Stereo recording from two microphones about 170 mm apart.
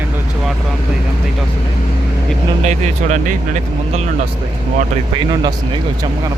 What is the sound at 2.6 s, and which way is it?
Speech, 45° right (ahead or behind).